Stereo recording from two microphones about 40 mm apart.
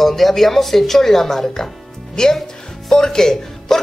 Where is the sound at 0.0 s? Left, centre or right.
Centre.